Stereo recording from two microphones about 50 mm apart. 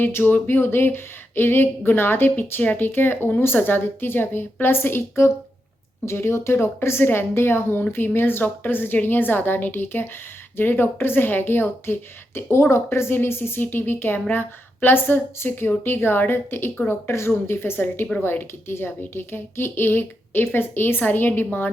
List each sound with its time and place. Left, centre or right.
0.0 s speech: left
6.8 s speech: left